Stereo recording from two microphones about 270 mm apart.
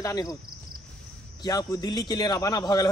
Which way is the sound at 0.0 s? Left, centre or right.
Centre.